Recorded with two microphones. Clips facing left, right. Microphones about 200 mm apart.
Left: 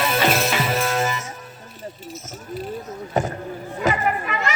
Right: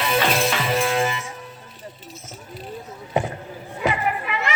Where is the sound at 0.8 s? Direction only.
45° left (ahead or behind).